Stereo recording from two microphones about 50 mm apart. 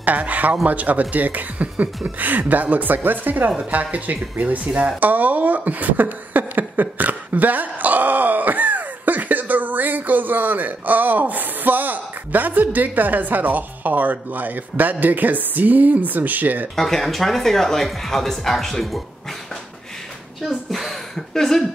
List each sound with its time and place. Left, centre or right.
0.0 s speech: right
16.7 s speech: centre
20.4 s speech: centre